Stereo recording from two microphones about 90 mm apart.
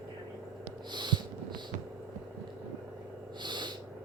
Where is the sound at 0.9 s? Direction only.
55° right (ahead or behind).